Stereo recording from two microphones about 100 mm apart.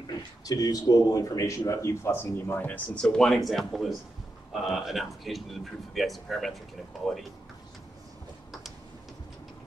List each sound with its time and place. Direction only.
0.5 s speech: 35° left (ahead or behind); by 6.6 s centre (ahead or behind)